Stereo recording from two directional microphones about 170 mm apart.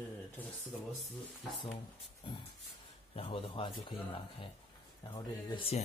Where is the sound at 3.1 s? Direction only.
35° left (ahead or behind).